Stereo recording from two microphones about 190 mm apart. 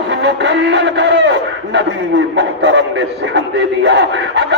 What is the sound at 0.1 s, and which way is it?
A man's voice, 65° right (ahead or behind).